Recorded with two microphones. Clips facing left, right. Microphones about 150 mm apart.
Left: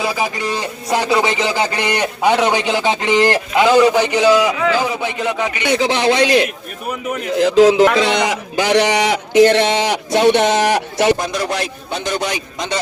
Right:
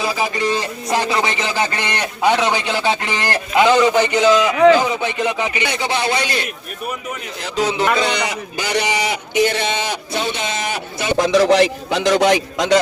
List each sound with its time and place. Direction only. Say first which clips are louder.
0.0 s speech: even; 5° left (ahead or behind)
4.8 s chopping: even; centre (ahead or behind)
5.7 s a man's voice: left 8 dB; 90° left
11.2 s a man's voice: right 8 dB; 90° right